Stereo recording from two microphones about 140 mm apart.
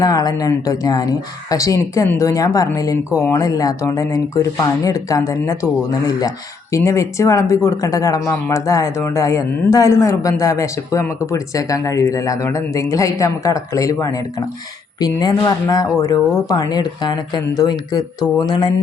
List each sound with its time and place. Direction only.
0.0 s speech: 30° left (ahead or behind)